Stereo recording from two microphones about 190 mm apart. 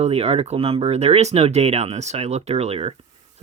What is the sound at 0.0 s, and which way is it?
Speech, 35° right (ahead or behind).